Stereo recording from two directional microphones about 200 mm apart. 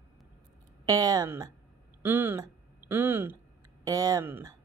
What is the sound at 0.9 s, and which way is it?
Speech, 20° right (ahead or behind).